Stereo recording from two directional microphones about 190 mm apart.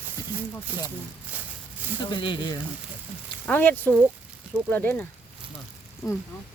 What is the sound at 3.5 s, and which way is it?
Speech, 10° left (ahead or behind).